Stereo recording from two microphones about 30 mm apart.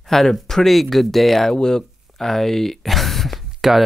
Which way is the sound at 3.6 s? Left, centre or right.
Centre.